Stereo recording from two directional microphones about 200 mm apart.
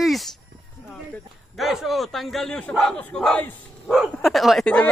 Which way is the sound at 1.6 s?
Centre (ahead or behind).